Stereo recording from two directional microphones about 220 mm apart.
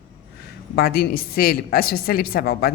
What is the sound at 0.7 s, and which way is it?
A woman's voice, 45° left (ahead or behind).